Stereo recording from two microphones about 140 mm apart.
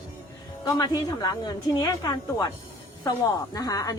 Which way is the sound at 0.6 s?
25° left (ahead or behind).